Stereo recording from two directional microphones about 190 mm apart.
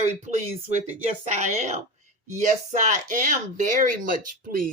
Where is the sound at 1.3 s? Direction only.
40° right (ahead or behind).